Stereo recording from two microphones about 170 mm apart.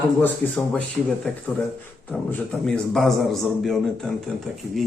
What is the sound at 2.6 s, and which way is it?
A man's voice, 5° left (ahead or behind).